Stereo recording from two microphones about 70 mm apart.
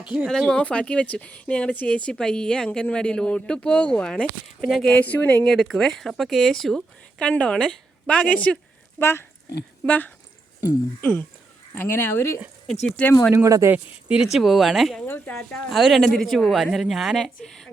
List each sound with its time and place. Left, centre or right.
0.0 s speech: centre
0.3 s speech: centre
4.9 s speech: left
5.5 s speech: centre
7.3 s speech: centre
9.0 s speech: left
9.8 s speech: centre
13.0 s speech: centre
13.3 s speech: right
14.1 s speech: centre